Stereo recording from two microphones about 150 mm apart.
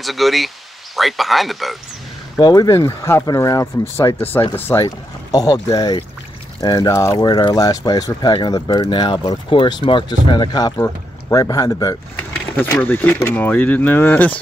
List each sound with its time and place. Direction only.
0.0 s speech: centre (ahead or behind)
2.3 s speech: 25° left (ahead or behind)
4.8 s speech: 25° left (ahead or behind)